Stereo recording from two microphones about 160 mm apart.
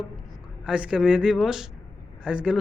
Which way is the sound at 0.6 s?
5° right (ahead or behind).